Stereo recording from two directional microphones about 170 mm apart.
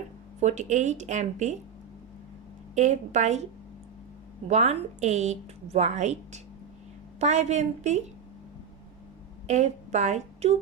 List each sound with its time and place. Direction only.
0.3 s speech: 45° right (ahead or behind)
2.7 s speech: 45° right (ahead or behind)
4.4 s speech: 40° right (ahead or behind)
9.5 s a woman's voice: 40° right (ahead or behind)